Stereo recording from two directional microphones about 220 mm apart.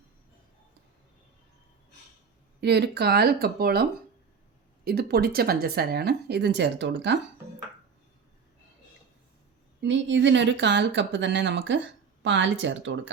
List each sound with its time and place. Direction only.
2.6 s speech: 50° right (ahead or behind)
4.9 s speech: 45° right (ahead or behind)
9.8 s speech: 55° right (ahead or behind)